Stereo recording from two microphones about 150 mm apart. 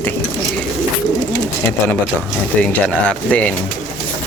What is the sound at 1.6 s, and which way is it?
Speech, 15° left (ahead or behind).